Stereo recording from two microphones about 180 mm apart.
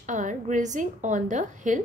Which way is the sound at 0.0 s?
45° right (ahead or behind).